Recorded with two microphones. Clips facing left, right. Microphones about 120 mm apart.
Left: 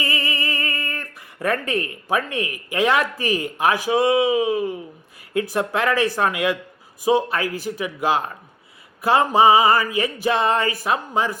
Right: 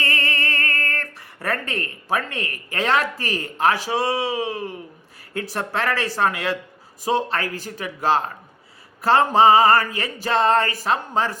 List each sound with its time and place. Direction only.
0.0 s speech: 10° left (ahead or behind)